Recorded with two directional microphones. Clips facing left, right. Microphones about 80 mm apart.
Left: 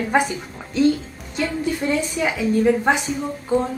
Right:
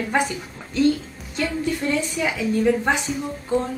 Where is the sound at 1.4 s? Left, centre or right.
Centre.